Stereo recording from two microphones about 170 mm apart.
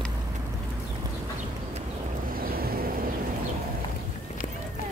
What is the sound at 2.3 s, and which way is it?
Boat, 60° right (ahead or behind).